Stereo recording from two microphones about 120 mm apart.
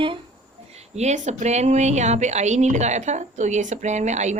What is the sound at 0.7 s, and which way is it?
Speech, 65° right (ahead or behind).